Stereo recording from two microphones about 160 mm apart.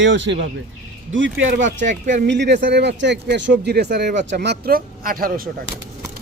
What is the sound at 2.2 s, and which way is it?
Speech, 90° right.